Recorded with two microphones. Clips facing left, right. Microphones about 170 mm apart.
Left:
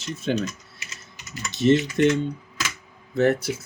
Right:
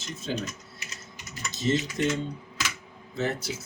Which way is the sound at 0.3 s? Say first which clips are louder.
Left 7 dB; 65° left (ahead or behind).